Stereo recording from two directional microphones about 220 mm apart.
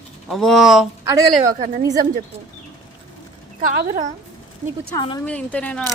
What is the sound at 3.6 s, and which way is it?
Speech, 40° right (ahead or behind).